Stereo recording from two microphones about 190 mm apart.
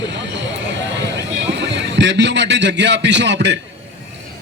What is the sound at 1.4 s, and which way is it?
A man's voice, 70° right (ahead or behind).